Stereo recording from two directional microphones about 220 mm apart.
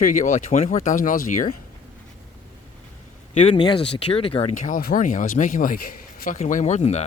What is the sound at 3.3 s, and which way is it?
Speech, 25° left (ahead or behind).